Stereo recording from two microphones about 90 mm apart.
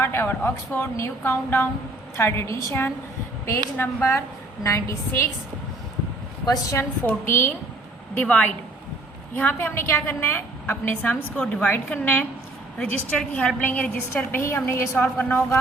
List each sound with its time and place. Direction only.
0.0 s a woman's voice: 25° left (ahead or behind)
6.4 s a woman's voice: 40° left (ahead or behind)
7.0 s a woman's voice: 20° left (ahead or behind)
14.1 s a woman's voice: 25° left (ahead or behind)